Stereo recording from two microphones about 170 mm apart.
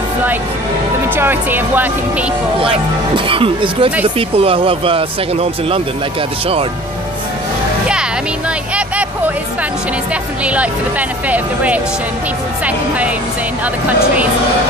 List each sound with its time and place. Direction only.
1.1 s speech: 10° right (ahead or behind)
3.2 s speech: 30° right (ahead or behind)
8.7 s speech: 10° right (ahead or behind)
10.4 s speech: 10° right (ahead or behind)